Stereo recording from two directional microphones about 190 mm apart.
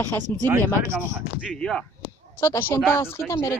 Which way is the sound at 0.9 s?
10° right (ahead or behind).